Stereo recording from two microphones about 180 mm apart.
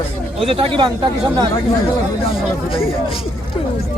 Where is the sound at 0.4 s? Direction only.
30° right (ahead or behind).